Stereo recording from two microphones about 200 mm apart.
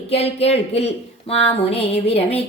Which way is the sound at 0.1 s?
30° left (ahead or behind).